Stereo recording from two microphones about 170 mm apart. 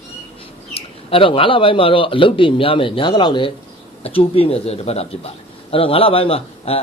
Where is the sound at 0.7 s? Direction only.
35° left (ahead or behind).